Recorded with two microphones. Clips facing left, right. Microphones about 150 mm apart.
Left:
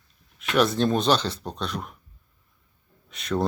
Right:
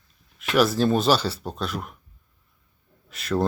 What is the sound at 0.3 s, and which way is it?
Speech, 5° right (ahead or behind).